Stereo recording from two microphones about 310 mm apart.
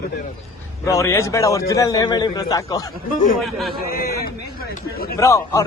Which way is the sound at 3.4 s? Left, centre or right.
Centre.